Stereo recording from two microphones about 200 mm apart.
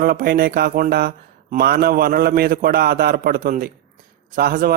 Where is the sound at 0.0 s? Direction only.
50° right (ahead or behind).